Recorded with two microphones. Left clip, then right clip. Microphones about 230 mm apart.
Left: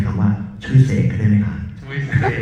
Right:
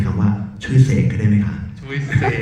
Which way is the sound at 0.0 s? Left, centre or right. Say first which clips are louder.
Even; right.